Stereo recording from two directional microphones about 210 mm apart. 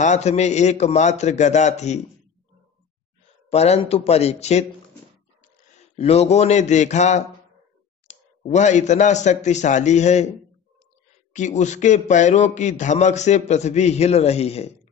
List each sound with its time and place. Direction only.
0.0 s a man's voice: 35° left (ahead or behind)
3.4 s speech: 30° left (ahead or behind)
5.9 s a man's voice: 30° left (ahead or behind)
8.5 s a man's voice: 35° left (ahead or behind)
11.3 s a man's voice: 35° left (ahead or behind)